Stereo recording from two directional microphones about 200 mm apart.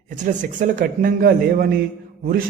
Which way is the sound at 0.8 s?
45° right (ahead or behind).